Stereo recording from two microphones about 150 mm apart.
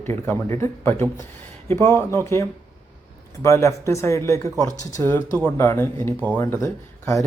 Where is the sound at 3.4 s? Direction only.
20° left (ahead or behind).